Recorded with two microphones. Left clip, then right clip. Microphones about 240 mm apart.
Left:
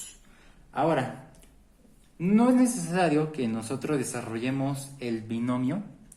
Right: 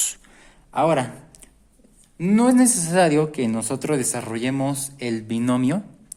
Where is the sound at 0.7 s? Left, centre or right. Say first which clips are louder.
Right 6 dB; right.